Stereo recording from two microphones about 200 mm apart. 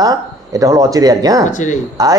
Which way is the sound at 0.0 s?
20° right (ahead or behind).